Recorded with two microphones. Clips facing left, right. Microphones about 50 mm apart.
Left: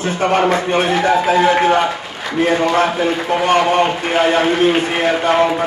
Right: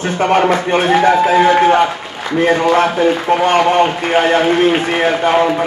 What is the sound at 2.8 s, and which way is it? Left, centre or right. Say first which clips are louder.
Speech: right 3 dB; centre.